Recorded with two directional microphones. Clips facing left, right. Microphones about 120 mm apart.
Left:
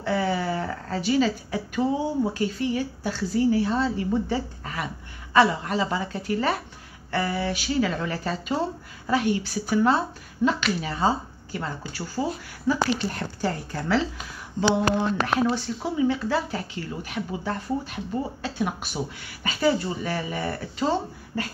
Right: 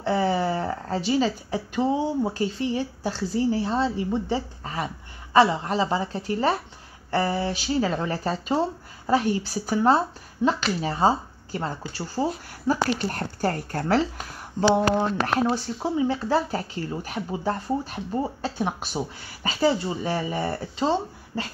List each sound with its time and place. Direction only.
0.0 s a sound: 30° right (ahead or behind)
2.3 s speech: 30° right (ahead or behind)
12.6 s speech: 50° right (ahead or behind)
15.0 s speech: 35° right (ahead or behind)